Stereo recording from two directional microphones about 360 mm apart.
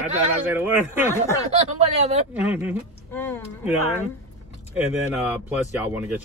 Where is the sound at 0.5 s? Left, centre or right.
Centre.